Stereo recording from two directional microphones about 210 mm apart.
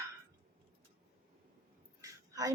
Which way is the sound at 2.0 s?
15° right (ahead or behind).